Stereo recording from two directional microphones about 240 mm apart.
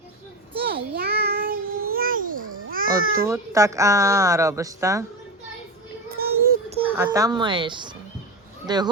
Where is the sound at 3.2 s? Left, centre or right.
Centre.